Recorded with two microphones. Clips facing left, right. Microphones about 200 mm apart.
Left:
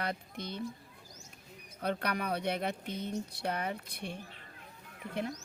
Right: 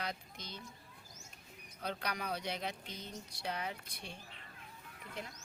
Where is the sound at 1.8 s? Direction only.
60° left (ahead or behind).